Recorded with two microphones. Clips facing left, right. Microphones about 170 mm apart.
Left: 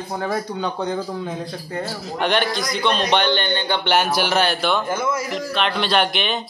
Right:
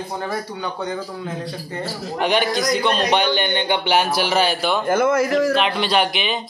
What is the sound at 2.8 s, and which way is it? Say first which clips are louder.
Speech: left 3 dB; 5° right (ahead or behind).